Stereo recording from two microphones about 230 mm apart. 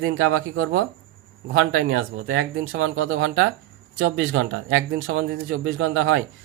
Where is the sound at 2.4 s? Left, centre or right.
Right.